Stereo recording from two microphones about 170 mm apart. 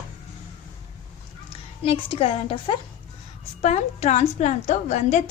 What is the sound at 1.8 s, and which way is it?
A woman's voice, 35° left (ahead or behind).